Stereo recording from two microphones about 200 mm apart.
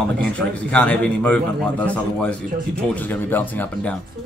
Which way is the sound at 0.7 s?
5° left (ahead or behind).